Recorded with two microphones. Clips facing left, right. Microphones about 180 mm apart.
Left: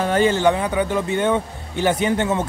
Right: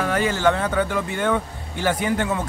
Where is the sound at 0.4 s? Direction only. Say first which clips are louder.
Left 2 dB; 15° left (ahead or behind).